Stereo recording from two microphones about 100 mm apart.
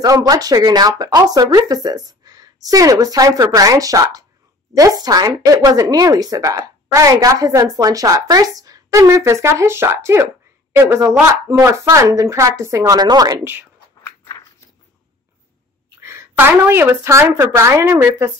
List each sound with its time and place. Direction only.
0.0 s speech: 40° right (ahead or behind)
13.4 s a woman's voice: 20° right (ahead or behind)
16.0 s a woman's voice: 25° right (ahead or behind)